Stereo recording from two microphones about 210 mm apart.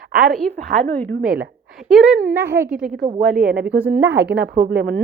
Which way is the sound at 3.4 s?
50° right (ahead or behind).